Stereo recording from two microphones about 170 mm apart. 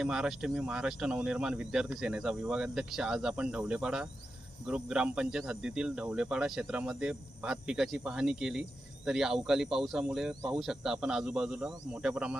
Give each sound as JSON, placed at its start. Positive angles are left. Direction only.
{"t": 0.0, "sound": "speech", "side_deg": -5}